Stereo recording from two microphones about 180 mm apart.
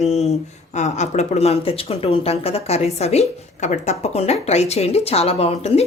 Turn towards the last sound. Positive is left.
turn(degrees=35)  # may be behind; listen again after turning